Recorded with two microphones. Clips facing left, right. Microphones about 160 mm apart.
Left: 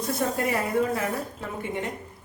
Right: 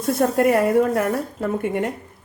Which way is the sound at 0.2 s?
55° right (ahead or behind).